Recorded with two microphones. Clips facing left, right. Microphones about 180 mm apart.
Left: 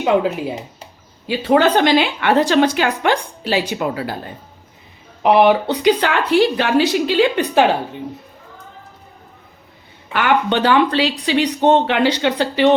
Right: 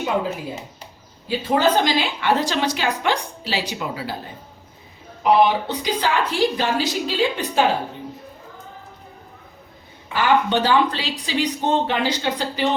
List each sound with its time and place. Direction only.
1.3 s a woman's voice: 65° left (ahead or behind)
5.2 s speech: 70° left (ahead or behind)
10.1 s speech: 65° left (ahead or behind)